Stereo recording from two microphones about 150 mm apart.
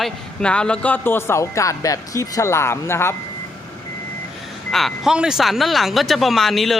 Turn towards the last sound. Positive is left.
turn(degrees=0)  # may be behind; listen again after turning